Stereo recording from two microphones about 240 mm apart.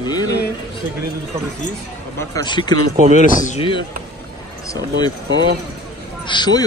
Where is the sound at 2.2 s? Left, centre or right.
Centre.